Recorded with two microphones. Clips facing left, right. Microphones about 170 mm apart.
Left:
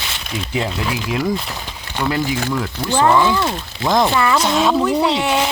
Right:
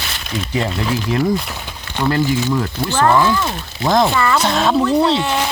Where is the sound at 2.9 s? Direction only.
15° left (ahead or behind).